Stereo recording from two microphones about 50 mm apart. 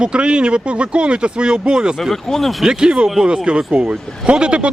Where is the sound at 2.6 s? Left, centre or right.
Centre.